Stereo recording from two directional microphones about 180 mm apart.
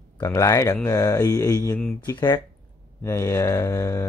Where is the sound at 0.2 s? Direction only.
20° left (ahead or behind).